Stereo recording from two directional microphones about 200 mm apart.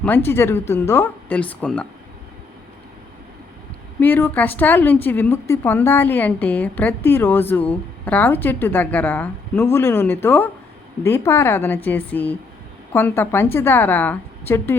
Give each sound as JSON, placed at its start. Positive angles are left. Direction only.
{"t": 0.0, "sound": "a woman's voice", "side_deg": 10}
{"t": 4.0, "sound": "a woman's voice", "side_deg": 10}